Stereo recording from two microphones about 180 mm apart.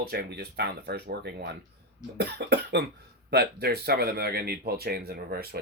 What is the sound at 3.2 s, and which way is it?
Speech, 65° right (ahead or behind).